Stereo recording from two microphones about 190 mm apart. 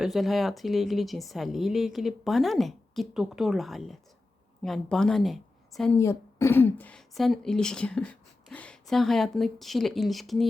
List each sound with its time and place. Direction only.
0.0 s a woman's voice: centre (ahead or behind)
6.0 s speech: 15° left (ahead or behind)